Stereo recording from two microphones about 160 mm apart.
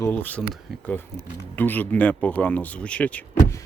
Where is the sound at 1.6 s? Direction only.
10° left (ahead or behind).